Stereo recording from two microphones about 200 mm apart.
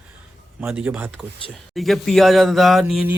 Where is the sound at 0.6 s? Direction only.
10° right (ahead or behind).